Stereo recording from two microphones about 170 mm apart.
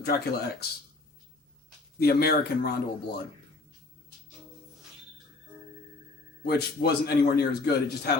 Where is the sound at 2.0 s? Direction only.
65° left (ahead or behind).